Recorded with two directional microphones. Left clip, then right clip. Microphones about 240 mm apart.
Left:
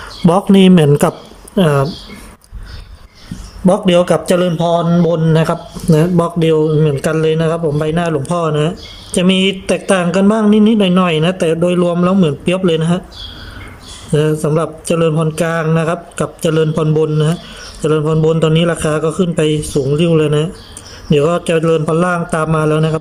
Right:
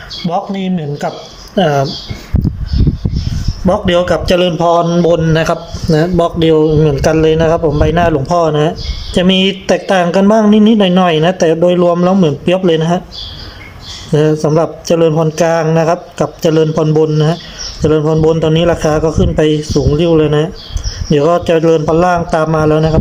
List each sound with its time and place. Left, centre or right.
0.3 s speech: left
1.5 s speech: centre
3.7 s a man's voice: centre
14.1 s a man's voice: centre